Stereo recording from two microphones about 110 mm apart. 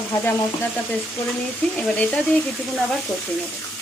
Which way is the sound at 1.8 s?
10° left (ahead or behind).